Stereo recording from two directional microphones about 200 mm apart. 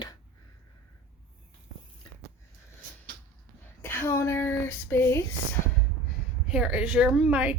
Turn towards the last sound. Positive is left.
turn(degrees=-5)  # may be behind; listen again after turning